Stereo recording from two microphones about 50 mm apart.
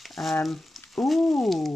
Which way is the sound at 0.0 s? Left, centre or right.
Centre.